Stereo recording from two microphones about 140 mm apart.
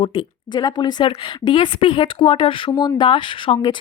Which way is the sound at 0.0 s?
35° left (ahead or behind).